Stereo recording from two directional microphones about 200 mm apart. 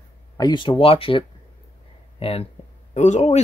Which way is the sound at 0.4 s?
20° left (ahead or behind).